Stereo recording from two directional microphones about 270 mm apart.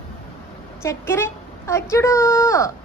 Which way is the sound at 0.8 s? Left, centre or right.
Centre.